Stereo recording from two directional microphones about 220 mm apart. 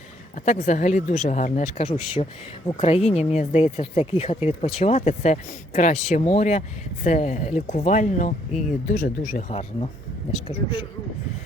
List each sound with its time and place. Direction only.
0.3 s speech: 35° left (ahead or behind)